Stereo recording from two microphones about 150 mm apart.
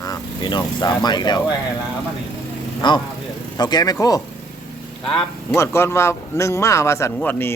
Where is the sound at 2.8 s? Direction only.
30° left (ahead or behind).